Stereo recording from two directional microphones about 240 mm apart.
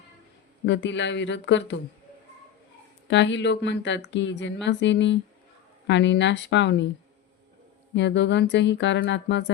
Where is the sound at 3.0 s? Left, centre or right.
Left.